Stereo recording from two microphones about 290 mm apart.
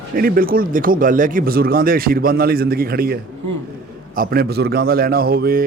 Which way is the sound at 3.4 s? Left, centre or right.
Right.